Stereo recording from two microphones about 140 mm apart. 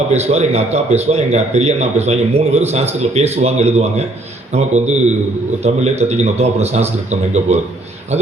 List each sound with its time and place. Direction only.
0.1 s a man's voice: 50° right (ahead or behind)